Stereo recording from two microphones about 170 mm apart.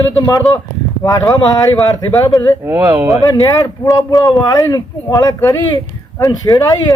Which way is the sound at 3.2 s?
20° left (ahead or behind).